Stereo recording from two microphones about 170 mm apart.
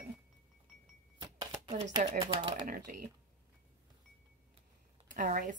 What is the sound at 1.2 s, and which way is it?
Cash register, 20° right (ahead or behind).